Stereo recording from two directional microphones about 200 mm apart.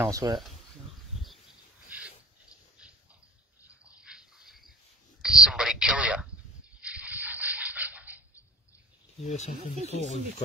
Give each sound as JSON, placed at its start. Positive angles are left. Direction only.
{"t": 0.0, "sound": "speech", "side_deg": -15}
{"t": 3.6, "sound": "a sound", "side_deg": -5}
{"t": 6.8, "sound": "rub", "side_deg": -5}
{"t": 9.2, "sound": "speech", "side_deg": 35}